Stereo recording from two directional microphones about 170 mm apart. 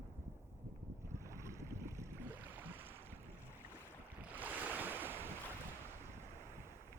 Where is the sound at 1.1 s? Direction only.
15° right (ahead or behind).